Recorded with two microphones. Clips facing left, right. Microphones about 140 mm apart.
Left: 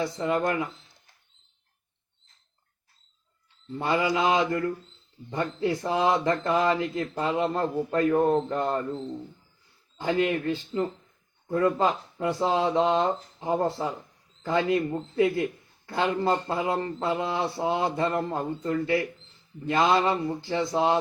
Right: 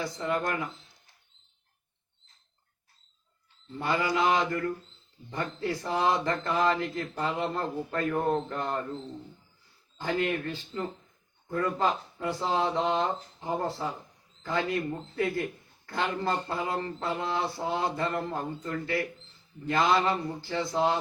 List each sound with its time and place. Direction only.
0.0 s speech: 25° left (ahead or behind)
3.8 s speech: 25° left (ahead or behind)
10.0 s speech: 20° left (ahead or behind)